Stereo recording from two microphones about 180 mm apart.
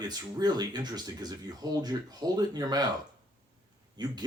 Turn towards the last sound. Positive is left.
turn(degrees=-25)  # may be behind; listen again after turning